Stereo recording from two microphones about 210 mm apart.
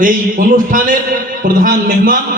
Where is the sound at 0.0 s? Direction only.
40° right (ahead or behind).